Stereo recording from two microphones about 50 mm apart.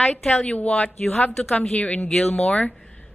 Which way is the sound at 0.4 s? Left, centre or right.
Left.